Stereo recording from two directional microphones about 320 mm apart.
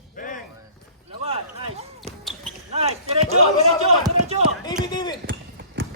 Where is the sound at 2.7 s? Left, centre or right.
Centre.